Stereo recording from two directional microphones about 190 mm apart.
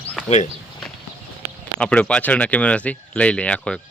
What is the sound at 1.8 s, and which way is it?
Speech, 5° left (ahead or behind).